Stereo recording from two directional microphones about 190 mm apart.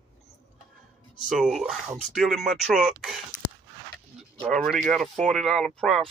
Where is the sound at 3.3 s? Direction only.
40° left (ahead or behind).